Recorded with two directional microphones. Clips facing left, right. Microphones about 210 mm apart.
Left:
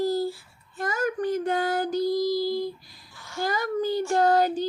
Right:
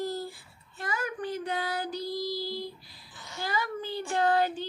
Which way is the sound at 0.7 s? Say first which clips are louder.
Left 7 dB; 45° left (ahead or behind).